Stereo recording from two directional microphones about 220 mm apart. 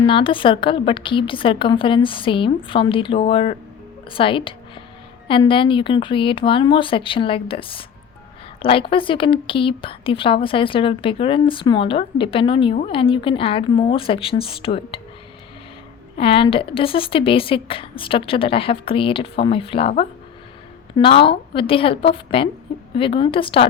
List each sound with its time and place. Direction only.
0.0 s speech: 25° left (ahead or behind)
16.1 s speech: 25° left (ahead or behind)